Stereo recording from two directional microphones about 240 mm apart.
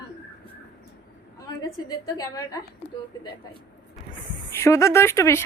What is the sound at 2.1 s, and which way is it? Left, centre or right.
Speech, centre.